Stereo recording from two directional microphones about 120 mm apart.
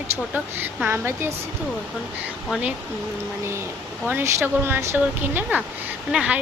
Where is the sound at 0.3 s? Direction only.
15° right (ahead or behind).